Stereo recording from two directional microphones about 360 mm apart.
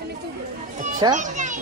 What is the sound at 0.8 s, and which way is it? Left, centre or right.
Children playing, centre.